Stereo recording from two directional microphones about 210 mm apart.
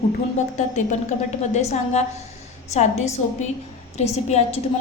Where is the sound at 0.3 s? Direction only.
35° left (ahead or behind).